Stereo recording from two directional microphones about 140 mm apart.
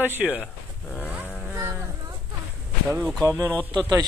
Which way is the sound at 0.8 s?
5° left (ahead or behind).